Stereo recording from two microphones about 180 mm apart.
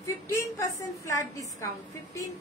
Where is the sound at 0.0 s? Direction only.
20° left (ahead or behind).